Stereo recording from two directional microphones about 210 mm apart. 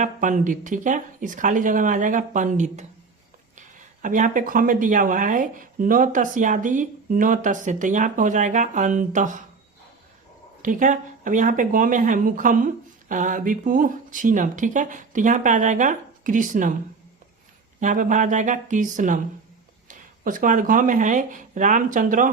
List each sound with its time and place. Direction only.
0.0 s speech: 40° right (ahead or behind)
4.0 s speech: 40° right (ahead or behind)
10.6 s speech: 40° right (ahead or behind)
17.7 s speech: 35° right (ahead or behind)